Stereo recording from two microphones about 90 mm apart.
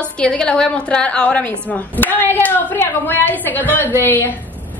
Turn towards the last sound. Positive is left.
turn(degrees=25)  # may be behind; listen again after turning